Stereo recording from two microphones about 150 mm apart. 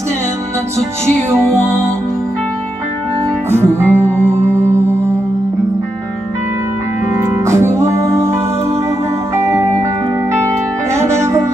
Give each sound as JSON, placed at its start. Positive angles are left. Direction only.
{"t": 3.4, "sound": "music", "side_deg": -15}
{"t": 7.2, "sound": "music", "side_deg": -15}
{"t": 9.4, "sound": "music", "side_deg": -20}
{"t": 11.0, "sound": "music", "side_deg": -20}